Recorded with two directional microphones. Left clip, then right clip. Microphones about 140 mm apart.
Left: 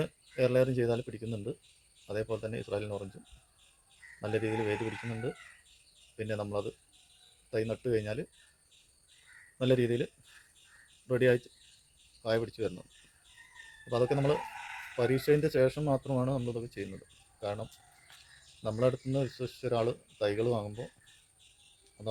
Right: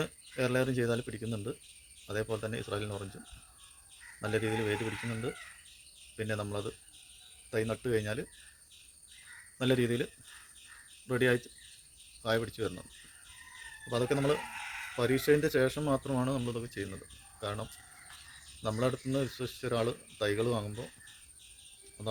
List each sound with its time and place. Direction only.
0.0 s speech: 20° right (ahead or behind)
4.2 s speech: 20° right (ahead or behind)
6.1 s speech: 20° right (ahead or behind)
9.6 s speech: 20° right (ahead or behind)
13.9 s speech: 20° right (ahead or behind)
17.4 s cricket: 20° right (ahead or behind)
18.6 s speech: 25° right (ahead or behind)